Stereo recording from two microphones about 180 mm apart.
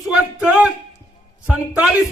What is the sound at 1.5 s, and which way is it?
Speech, 5° right (ahead or behind).